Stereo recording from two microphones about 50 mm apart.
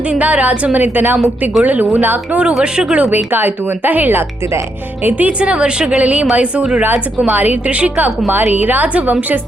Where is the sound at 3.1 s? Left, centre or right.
Right.